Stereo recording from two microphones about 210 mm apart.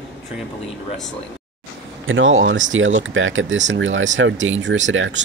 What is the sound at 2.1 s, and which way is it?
Speech, 65° right (ahead or behind).